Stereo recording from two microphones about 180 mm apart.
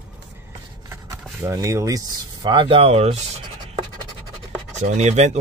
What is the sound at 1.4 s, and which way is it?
Speech, 15° right (ahead or behind).